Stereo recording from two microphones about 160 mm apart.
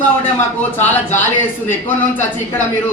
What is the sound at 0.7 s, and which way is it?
Speech, 10° left (ahead or behind).